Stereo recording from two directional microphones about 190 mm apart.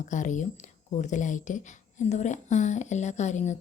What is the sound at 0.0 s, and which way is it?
Speech, 40° left (ahead or behind).